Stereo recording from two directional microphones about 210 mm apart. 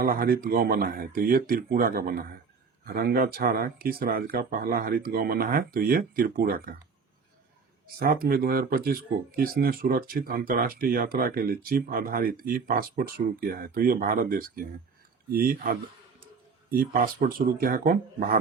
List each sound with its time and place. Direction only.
0.0 s speech: 45° right (ahead or behind)
7.9 s speech: 45° right (ahead or behind)